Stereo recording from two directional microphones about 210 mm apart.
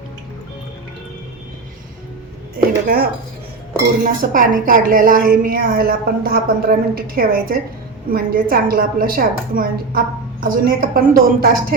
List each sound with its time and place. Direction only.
2.8 s a woman's voice: 45° right (ahead or behind)